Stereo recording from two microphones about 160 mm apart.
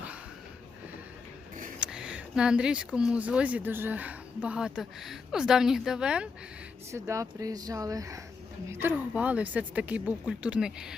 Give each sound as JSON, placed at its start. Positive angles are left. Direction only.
{"t": 1.8, "sound": "speech", "side_deg": -5}
{"t": 6.9, "sound": "speech", "side_deg": -20}